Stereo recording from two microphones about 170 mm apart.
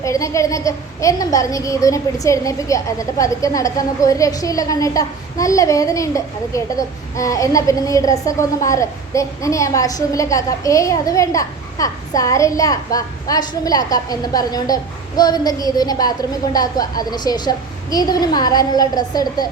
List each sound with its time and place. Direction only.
0.0 s a child's voice: 20° left (ahead or behind)